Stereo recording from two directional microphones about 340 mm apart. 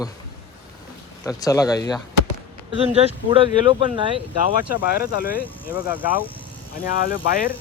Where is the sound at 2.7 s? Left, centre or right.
Centre.